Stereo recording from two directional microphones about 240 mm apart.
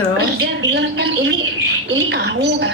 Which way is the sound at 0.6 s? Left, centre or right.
Right.